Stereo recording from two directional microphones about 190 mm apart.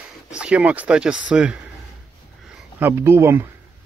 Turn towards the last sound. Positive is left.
turn(degrees=-15)  # may be behind; listen again after turning